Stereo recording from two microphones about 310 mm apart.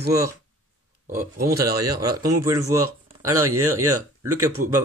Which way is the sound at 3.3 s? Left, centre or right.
Right.